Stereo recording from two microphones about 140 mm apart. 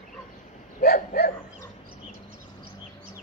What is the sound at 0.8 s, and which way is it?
Dog, 90° left.